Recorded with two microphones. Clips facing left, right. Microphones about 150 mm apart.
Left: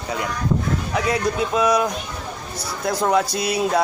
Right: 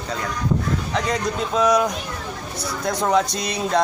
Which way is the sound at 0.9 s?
5° left (ahead or behind).